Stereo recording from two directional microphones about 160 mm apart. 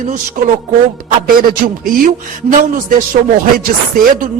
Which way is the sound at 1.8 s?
60° right (ahead or behind).